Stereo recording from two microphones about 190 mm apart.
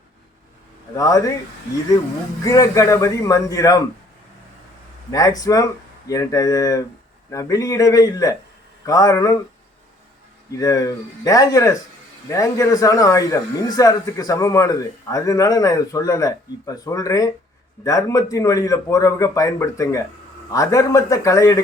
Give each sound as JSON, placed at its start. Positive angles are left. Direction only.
{"t": 0.9, "sound": "a man's voice", "side_deg": 20}
{"t": 2.4, "sound": "a man's voice", "side_deg": 20}
{"t": 5.1, "sound": "a man's voice", "side_deg": 20}
{"t": 10.6, "sound": "a man's voice", "side_deg": 20}